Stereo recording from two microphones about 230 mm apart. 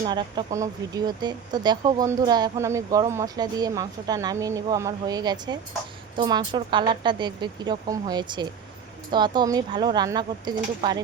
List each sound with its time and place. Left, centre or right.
0.0 s speech: centre